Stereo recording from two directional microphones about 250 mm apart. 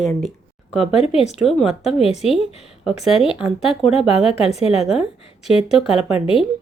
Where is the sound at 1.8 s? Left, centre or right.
Left.